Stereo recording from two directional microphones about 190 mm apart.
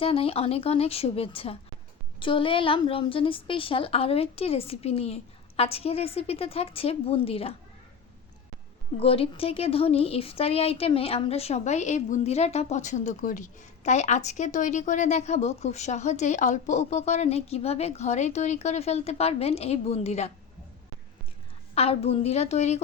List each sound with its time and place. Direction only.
0.0 s speech: 30° left (ahead or behind)
9.0 s speech: 30° left (ahead or behind)
21.8 s speech: 30° left (ahead or behind)